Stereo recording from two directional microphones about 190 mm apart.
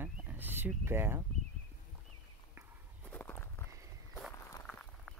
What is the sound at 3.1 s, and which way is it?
Walk, 10° left (ahead or behind).